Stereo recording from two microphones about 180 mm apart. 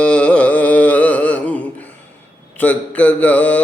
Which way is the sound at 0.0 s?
5° left (ahead or behind).